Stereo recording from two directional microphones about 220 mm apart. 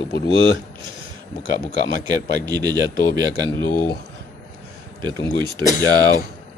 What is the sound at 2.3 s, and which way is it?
Speech, 15° right (ahead or behind).